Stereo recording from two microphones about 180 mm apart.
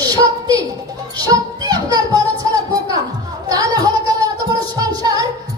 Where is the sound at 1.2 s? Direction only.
20° right (ahead or behind).